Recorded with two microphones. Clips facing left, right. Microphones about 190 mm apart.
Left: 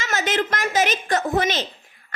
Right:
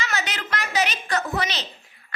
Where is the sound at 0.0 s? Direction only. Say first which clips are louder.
Left 6 dB; 45° left (ahead or behind).